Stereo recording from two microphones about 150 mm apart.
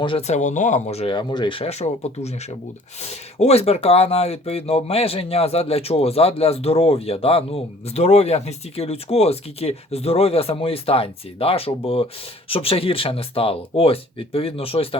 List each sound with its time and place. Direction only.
0.0 s speech: 40° left (ahead or behind)
1.1 s speech: 30° left (ahead or behind)